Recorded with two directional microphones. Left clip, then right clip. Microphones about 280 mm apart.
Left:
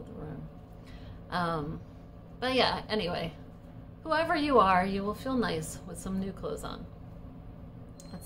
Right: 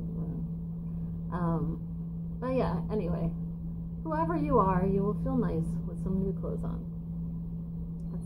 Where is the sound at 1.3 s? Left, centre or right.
Left.